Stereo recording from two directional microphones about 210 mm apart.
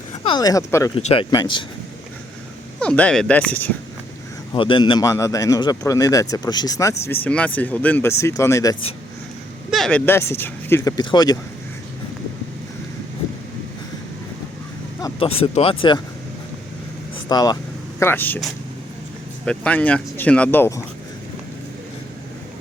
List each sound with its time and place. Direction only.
0.3 s a man's voice: 20° left (ahead or behind)
0.9 s speech: 25° left (ahead or behind)
2.8 s speech: 5° left (ahead or behind)
4.5 s a man's voice: 25° left (ahead or behind)
9.6 s a man's voice: centre (ahead or behind); by 11.3 s 20° left (ahead or behind)
15.0 s speech: 25° left (ahead or behind)
17.2 s a man's voice: 20° left (ahead or behind)